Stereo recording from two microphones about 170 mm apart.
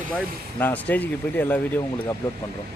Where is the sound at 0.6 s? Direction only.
10° left (ahead or behind).